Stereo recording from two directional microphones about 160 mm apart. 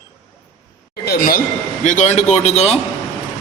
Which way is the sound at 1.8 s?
50° left (ahead or behind).